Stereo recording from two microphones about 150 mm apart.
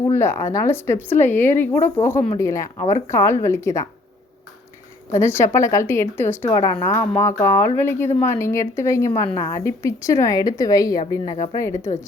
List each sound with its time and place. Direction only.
0.0 s speech: 15° left (ahead or behind)
5.1 s speech: 15° left (ahead or behind)